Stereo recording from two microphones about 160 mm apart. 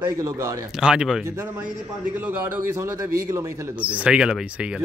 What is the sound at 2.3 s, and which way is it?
A man's voice, 15° right (ahead or behind).